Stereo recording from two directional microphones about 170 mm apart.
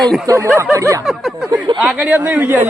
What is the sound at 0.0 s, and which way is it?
Speech, centre (ahead or behind).